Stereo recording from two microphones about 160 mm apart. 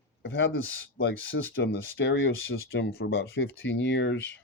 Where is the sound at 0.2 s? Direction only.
90° left.